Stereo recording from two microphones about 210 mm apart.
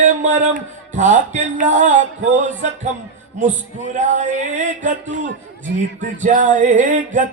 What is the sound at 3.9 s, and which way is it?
Speech, 35° right (ahead or behind).